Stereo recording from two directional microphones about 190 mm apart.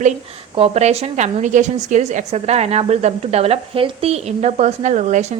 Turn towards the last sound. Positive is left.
turn(degrees=-40)  # may be behind; listen again after turning